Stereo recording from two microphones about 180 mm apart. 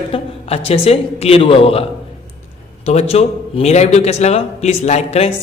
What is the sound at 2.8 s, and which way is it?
A man's voice, 35° left (ahead or behind).